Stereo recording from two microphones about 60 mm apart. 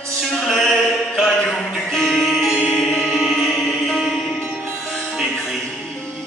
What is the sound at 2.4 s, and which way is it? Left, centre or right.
Music, centre.